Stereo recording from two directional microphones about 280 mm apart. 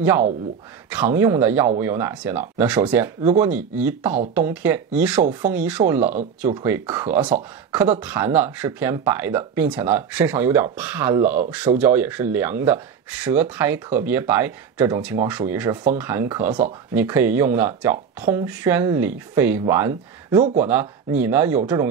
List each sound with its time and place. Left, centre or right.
0.8 s speech: centre